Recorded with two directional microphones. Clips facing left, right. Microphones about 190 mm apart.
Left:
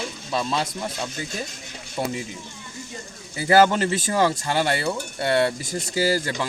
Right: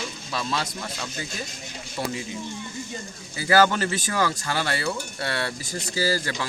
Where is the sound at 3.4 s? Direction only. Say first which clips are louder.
Left 3 dB; 25° left (ahead or behind).